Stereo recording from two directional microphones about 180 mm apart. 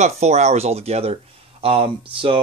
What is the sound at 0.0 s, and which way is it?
Speech, 40° right (ahead or behind).